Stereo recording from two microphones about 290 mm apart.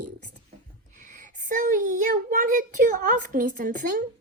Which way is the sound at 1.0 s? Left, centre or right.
Right.